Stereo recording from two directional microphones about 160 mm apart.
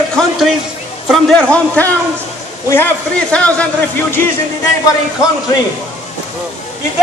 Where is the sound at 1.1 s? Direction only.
5° left (ahead or behind).